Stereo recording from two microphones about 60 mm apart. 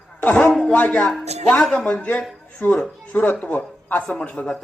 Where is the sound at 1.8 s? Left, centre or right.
Left.